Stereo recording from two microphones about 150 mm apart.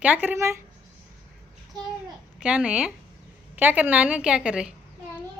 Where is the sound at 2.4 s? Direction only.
5° right (ahead or behind).